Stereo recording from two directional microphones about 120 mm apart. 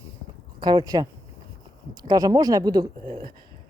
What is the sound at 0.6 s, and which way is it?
Speech, 40° right (ahead or behind).